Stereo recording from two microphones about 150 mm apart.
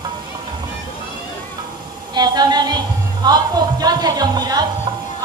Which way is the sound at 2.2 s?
25° right (ahead or behind).